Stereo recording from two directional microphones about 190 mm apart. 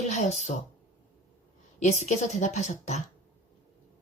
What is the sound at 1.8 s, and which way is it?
A woman's voice, 35° left (ahead or behind).